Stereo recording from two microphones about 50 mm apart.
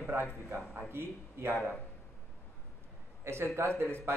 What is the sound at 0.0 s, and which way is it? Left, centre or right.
A man's voice, right.